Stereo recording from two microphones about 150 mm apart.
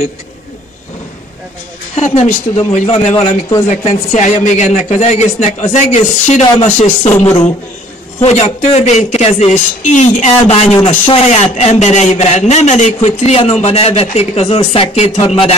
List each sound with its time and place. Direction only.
2.0 s a man's voice: 50° left (ahead or behind)